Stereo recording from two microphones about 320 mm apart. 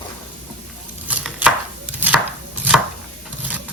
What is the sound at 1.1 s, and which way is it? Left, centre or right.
Chopping, centre.